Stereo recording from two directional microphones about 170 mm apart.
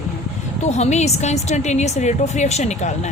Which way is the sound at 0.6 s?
40° left (ahead or behind).